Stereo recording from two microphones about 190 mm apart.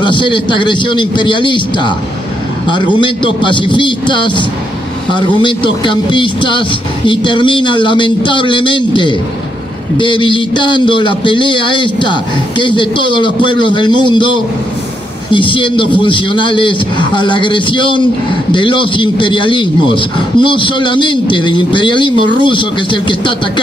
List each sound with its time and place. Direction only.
0.0 s a man's voice: 25° left (ahead or behind)